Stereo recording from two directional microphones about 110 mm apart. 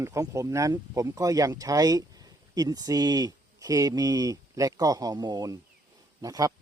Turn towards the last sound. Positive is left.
turn(degrees=-35)  # may be behind; listen again after turning